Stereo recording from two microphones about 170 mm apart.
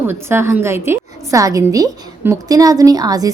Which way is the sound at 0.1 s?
15° right (ahead or behind).